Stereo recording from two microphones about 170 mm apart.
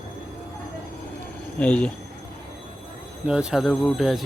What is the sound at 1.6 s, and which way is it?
Speech, 5° left (ahead or behind).